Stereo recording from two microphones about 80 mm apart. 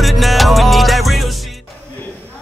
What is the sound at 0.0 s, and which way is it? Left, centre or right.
Music, centre.